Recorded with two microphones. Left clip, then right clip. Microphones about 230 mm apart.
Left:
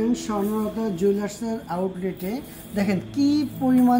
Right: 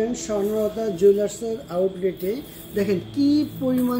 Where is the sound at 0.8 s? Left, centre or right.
Left.